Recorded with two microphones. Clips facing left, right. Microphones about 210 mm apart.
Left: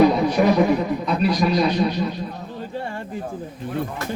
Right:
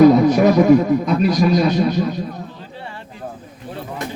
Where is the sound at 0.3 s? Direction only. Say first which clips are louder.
Right 4 dB; 45° right (ahead or behind).